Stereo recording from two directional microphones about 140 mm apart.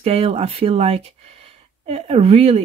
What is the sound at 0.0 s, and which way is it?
Speech, 45° right (ahead or behind).